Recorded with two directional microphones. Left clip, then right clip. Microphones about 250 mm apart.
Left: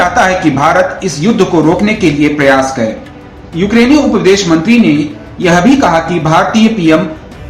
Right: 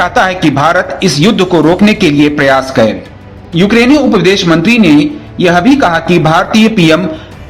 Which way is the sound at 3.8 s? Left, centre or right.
Right.